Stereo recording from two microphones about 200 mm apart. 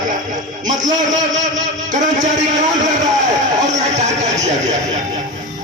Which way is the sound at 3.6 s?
35° right (ahead or behind).